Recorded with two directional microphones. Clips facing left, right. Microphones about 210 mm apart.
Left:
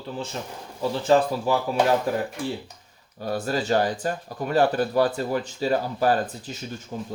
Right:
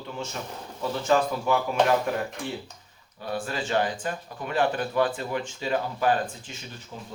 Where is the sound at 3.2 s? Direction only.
40° left (ahead or behind).